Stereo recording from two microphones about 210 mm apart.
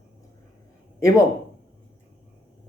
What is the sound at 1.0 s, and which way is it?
Speech, 15° left (ahead or behind).